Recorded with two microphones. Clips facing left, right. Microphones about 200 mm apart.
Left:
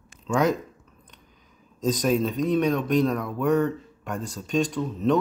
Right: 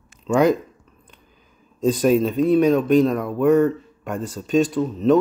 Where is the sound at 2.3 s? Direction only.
5° right (ahead or behind).